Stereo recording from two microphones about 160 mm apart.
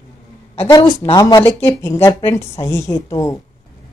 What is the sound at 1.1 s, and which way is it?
Speech, 25° left (ahead or behind).